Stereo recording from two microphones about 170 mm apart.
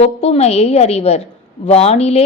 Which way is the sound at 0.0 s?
35° left (ahead or behind).